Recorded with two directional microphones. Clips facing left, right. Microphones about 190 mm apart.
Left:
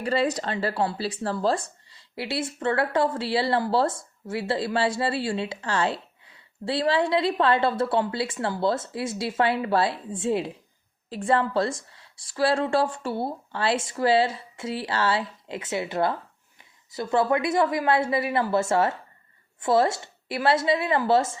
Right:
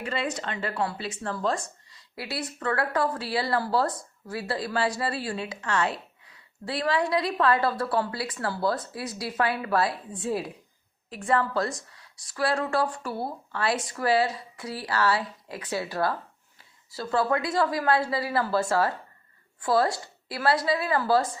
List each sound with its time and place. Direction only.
0.0 s speech: 35° left (ahead or behind)